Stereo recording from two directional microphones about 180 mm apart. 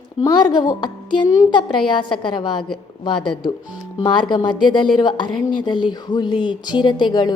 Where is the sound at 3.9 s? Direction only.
25° left (ahead or behind).